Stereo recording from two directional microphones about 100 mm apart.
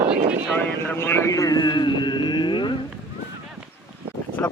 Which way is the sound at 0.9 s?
25° left (ahead or behind).